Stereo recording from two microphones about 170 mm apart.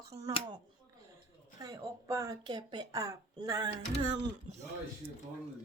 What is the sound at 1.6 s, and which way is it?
Speech, 20° right (ahead or behind).